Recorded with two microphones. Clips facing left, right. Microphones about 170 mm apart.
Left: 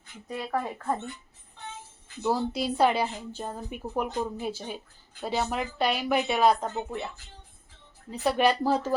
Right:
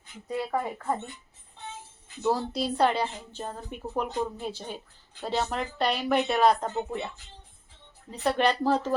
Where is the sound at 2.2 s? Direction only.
Centre (ahead or behind).